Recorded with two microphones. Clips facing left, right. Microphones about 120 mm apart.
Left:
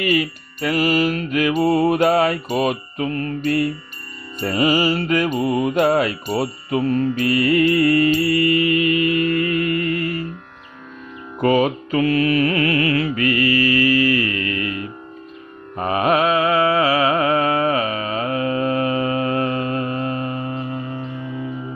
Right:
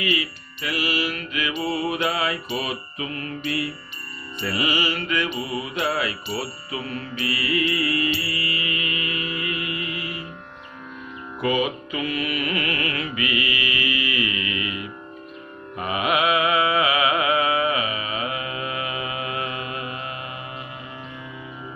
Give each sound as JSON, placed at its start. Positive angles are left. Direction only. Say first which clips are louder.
{"t": 0.0, "sound": "music", "louder": "left 6 dB", "side_deg": 45}
{"t": 11.3, "sound": "music", "louder": "left 6 dB", "side_deg": 45}
{"t": 13.1, "sound": "mantra", "louder": "left 8 dB", "side_deg": 40}